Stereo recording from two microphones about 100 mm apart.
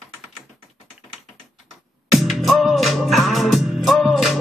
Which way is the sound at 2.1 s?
Centre (ahead or behind).